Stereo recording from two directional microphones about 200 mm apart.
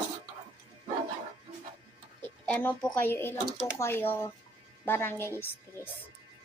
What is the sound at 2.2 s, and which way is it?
A woman's voice, 10° left (ahead or behind).